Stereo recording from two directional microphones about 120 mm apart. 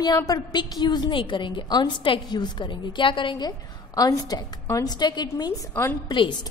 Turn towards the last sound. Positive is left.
turn(degrees=40)  # may be behind; listen again after turning